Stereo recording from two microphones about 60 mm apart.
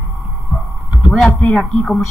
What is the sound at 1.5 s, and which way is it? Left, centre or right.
Speech, left.